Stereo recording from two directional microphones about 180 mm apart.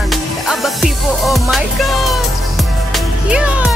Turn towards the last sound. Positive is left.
turn(degrees=-5)  # may be behind; listen again after turning